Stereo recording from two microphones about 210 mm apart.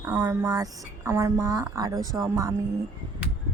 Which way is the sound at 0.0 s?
15° right (ahead or behind).